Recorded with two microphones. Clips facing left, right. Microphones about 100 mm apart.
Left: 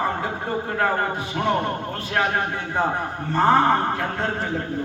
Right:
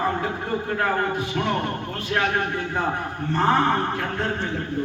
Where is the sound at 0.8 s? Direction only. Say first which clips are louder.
Left 2 dB; 25° left (ahead or behind).